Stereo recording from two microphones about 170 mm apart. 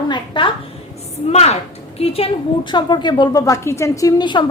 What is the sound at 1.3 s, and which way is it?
A child's voice, 40° left (ahead or behind).